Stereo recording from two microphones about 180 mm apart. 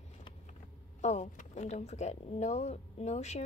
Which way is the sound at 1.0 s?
40° left (ahead or behind).